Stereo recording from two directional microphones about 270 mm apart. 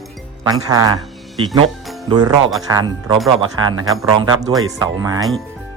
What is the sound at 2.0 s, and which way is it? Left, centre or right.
Speech, centre.